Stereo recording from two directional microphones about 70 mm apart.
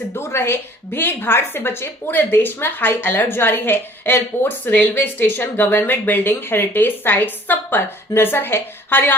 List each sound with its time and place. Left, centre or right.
0.1 s a woman's voice: left